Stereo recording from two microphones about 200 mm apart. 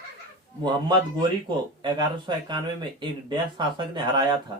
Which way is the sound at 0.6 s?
25° right (ahead or behind).